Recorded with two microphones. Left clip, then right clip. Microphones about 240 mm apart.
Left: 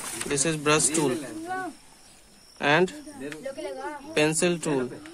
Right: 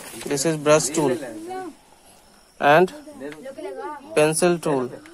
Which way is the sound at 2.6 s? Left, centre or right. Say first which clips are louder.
Right 7 dB; centre.